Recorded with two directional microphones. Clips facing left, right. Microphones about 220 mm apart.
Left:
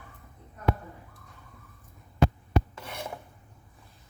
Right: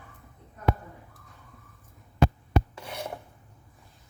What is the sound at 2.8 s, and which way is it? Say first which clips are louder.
Filing: right 2 dB; 10° right (ahead or behind).